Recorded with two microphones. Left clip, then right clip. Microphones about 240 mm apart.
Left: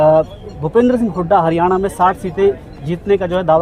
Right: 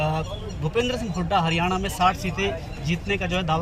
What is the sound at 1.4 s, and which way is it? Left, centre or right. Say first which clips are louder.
Speech: left 10 dB; left.